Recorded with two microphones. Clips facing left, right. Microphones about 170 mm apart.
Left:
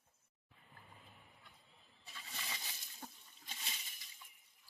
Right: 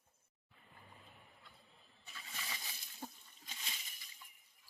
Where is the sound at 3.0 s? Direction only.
10° right (ahead or behind).